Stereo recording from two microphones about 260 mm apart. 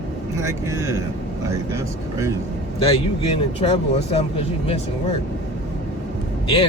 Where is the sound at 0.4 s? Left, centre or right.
Centre.